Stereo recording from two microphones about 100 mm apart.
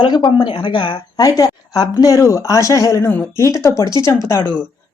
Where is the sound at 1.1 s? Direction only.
40° left (ahead or behind).